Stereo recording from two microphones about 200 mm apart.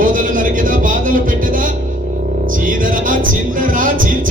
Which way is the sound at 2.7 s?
40° right (ahead or behind).